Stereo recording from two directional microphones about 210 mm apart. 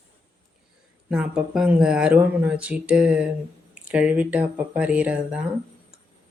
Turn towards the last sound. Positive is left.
turn(degrees=-5)  # may be behind; listen again after turning